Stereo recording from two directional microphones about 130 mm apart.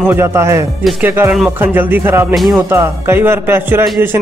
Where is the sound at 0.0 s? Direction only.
20° right (ahead or behind).